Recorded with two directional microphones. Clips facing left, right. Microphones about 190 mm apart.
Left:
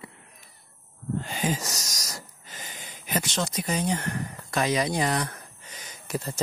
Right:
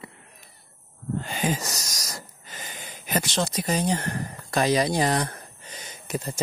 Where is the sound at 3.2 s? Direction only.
30° right (ahead or behind).